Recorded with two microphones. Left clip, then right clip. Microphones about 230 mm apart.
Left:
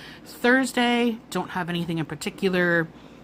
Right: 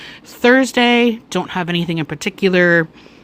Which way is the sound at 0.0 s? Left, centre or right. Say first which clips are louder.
Right 9 dB; right.